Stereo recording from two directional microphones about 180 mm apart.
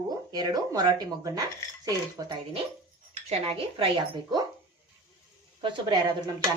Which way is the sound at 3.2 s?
35° right (ahead or behind).